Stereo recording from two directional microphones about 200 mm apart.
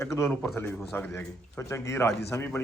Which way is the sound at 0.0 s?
10° left (ahead or behind).